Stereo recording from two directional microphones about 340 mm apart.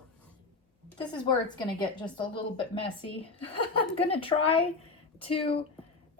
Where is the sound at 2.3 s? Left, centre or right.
Centre.